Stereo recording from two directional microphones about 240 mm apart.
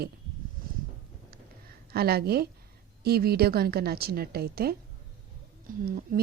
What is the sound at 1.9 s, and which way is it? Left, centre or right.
A woman's voice, right.